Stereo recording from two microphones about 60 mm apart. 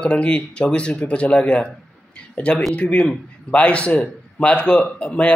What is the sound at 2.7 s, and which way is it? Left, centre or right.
A man's voice, left.